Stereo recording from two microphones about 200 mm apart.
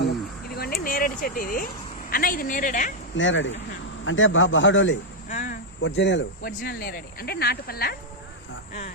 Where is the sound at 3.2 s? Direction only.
70° left (ahead or behind).